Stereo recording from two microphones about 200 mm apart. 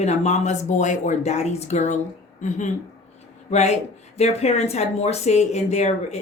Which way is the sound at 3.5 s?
35° left (ahead or behind).